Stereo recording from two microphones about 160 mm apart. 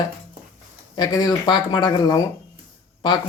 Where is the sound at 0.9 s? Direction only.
25° left (ahead or behind).